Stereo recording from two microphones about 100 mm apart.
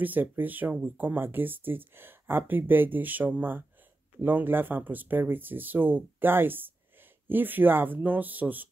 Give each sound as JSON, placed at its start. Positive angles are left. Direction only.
{"t": 0.0, "sound": "speech", "side_deg": -20}